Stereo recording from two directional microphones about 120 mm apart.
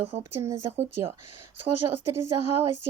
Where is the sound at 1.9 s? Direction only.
25° right (ahead or behind).